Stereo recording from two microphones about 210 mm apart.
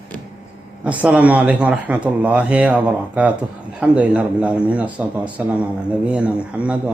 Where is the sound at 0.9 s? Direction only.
5° right (ahead or behind).